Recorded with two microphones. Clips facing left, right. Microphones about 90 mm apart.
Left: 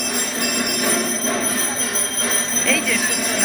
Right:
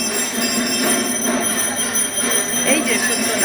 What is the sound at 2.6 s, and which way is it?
Speech, 15° right (ahead or behind).